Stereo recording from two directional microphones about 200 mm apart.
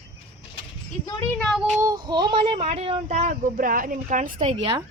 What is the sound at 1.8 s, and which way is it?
Speech, 20° right (ahead or behind).